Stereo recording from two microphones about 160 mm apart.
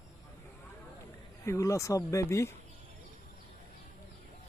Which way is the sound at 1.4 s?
20° left (ahead or behind).